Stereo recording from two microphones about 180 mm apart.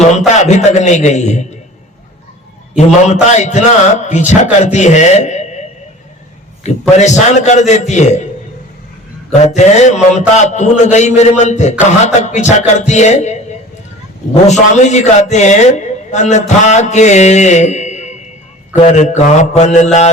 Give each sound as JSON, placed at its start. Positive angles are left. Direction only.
{"t": 0.0, "sound": "a man's voice", "side_deg": 40}
{"t": 2.7, "sound": "a man's voice", "side_deg": 40}
{"t": 9.4, "sound": "a man's voice", "side_deg": 40}
{"t": 14.4, "sound": "a man's voice", "side_deg": 40}